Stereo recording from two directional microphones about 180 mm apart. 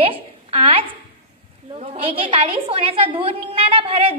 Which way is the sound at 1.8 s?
35° right (ahead or behind).